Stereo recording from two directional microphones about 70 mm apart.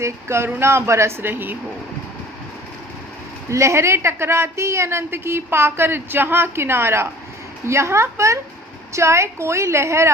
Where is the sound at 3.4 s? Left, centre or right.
Right.